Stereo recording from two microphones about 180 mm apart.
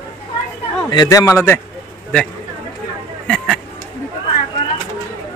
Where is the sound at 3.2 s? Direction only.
Centre (ahead or behind).